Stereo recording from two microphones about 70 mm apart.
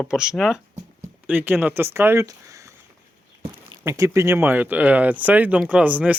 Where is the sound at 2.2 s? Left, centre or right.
Right.